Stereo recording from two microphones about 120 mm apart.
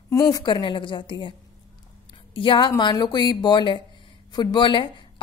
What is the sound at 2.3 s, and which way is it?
A woman's voice, 45° left (ahead or behind).